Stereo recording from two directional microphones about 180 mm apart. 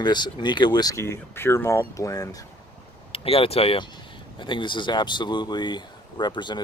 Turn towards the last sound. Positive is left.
turn(degrees=25)  # may be behind; listen again after turning